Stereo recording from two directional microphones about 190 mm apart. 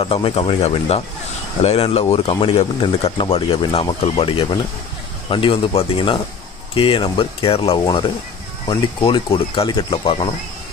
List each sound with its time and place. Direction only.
0.0 s speech: 30° left (ahead or behind)